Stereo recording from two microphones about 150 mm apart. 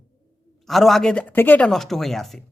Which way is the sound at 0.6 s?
Centre (ahead or behind).